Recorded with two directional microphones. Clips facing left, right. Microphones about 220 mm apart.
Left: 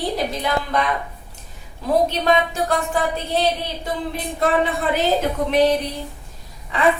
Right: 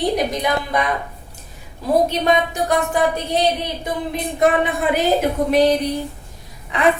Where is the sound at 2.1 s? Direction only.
15° right (ahead or behind).